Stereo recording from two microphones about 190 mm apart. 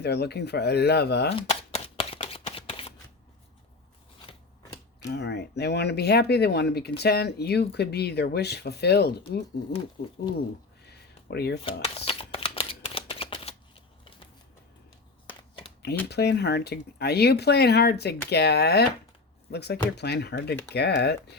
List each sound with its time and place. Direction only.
0.0 s speech: 60° left (ahead or behind)
1.4 s shuffling cards: 30° left (ahead or behind)
4.3 s scissors: 30° left (ahead or behind)
5.0 s speech: 60° left (ahead or behind)
10.8 s a sound: 60° left (ahead or behind)
11.6 s shuffling cards: 30° left (ahead or behind)
15.3 s a sound: 25° left (ahead or behind)
16.0 s speech: 60° left (ahead or behind)